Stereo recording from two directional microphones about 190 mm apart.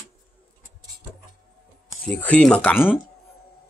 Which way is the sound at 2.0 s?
5° left (ahead or behind).